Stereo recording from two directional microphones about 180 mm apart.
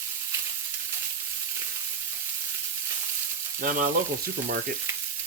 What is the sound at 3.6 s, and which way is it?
Frying, 50° right (ahead or behind).